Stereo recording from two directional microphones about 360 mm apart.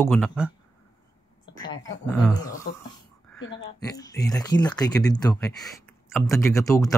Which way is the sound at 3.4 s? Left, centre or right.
Left.